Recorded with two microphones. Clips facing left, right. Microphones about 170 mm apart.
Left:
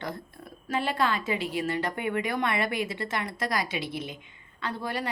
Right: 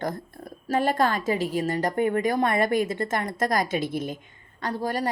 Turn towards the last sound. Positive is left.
turn(degrees=-40)  # may be behind; listen again after turning